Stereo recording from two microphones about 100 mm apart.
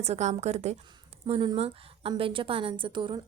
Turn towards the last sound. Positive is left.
turn(degrees=-55)  # may be behind; listen again after turning